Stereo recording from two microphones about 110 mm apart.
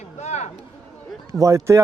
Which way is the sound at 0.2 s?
90° left.